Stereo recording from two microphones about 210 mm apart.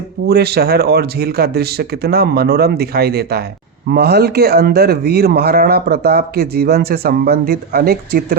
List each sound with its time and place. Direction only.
0.3 s speech: 50° right (ahead or behind)